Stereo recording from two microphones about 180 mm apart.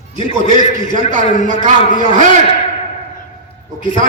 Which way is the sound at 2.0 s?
45° right (ahead or behind).